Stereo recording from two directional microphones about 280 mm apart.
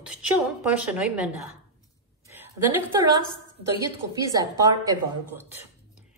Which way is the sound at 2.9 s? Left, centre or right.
Centre.